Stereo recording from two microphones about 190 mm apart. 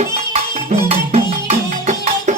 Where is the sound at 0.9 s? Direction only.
30° right (ahead or behind).